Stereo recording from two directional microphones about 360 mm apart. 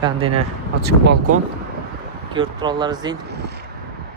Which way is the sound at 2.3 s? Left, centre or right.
Centre.